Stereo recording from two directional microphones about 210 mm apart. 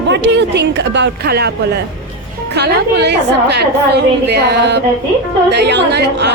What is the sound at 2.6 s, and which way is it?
A woman's voice, 50° right (ahead or behind).